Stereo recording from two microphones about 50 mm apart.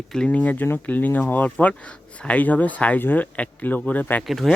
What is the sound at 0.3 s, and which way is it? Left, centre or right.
Speech, left.